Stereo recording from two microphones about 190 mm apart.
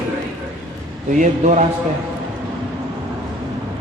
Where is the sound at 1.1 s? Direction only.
40° right (ahead or behind).